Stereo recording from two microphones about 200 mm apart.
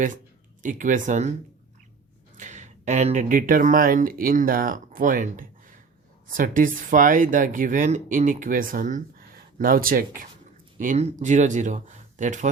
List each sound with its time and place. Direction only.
0.6 s speech: 40° right (ahead or behind)
2.4 s speech: 40° right (ahead or behind)